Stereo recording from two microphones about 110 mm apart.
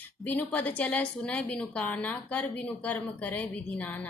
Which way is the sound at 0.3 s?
15° left (ahead or behind).